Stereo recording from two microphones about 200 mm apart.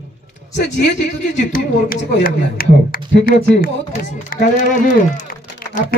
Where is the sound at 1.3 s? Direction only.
45° left (ahead or behind).